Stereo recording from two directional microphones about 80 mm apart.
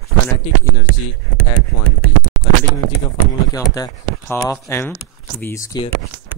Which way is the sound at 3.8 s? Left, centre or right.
Left.